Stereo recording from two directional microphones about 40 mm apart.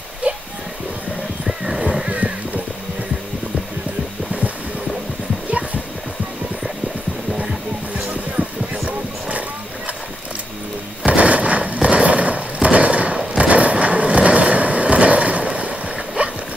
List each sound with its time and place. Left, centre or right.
0.2 s music: right
1.6 s music: centre
2.0 s horse: right
11.1 s a sound: right
13.4 s skateboard: right
16.2 s dog: right